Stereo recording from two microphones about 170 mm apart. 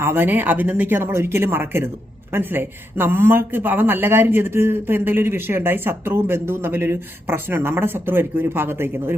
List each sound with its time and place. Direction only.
0.0 s speech: 15° right (ahead or behind)